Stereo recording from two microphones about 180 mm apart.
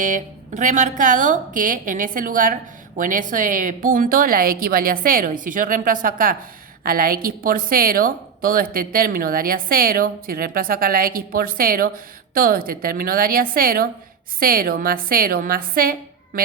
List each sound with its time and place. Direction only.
0.0 s a woman's voice: 45° right (ahead or behind)